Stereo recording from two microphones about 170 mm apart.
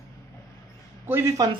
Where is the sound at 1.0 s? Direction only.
15° right (ahead or behind).